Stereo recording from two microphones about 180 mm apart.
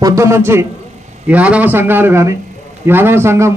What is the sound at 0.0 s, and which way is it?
A man's voice, 15° right (ahead or behind).